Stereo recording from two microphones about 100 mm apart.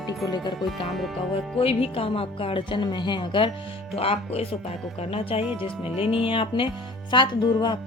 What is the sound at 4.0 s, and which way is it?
Speech, 75° left (ahead or behind).